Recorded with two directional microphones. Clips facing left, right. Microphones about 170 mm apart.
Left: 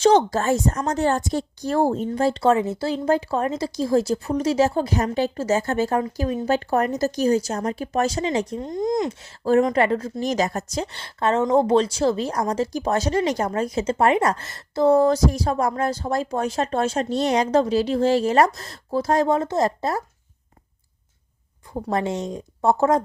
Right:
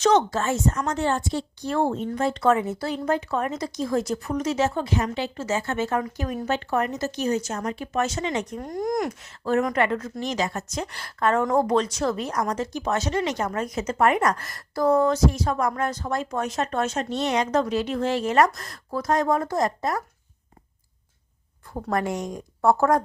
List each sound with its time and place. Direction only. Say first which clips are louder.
0.0 s a woman's voice: left 3 dB; 30° left (ahead or behind)
21.7 s a woman's voice: left 2 dB; 20° left (ahead or behind)